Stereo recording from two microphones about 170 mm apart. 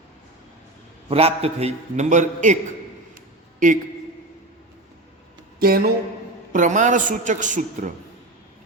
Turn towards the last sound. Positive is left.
turn(degrees=-45)  # may be behind; listen again after turning